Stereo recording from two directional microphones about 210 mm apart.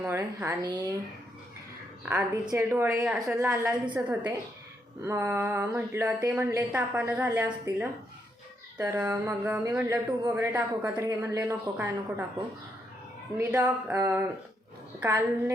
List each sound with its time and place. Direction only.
0.0 s speech: 10° right (ahead or behind)
2.0 s speech: 15° right (ahead or behind)
13.4 s speech: 10° right (ahead or behind)